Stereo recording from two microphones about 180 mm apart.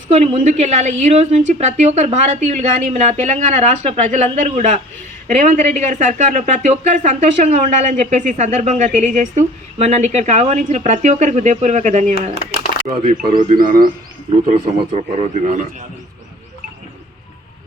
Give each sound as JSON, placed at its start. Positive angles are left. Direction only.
{"t": 0.1, "sound": "a woman's voice", "side_deg": -40}
{"t": 12.7, "sound": "a sound", "side_deg": 40}
{"t": 13.5, "sound": "speech", "side_deg": -50}
{"t": 14.4, "sound": "a woman's voice", "side_deg": -35}